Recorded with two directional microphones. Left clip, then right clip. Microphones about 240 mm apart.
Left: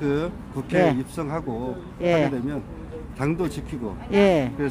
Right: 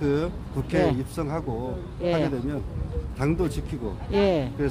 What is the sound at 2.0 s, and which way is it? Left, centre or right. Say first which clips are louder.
Speech: left 4 dB; left.